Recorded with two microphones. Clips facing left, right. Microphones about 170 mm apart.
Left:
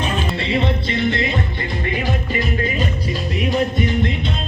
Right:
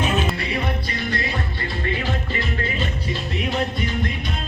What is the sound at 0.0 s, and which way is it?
Music, 10° right (ahead or behind).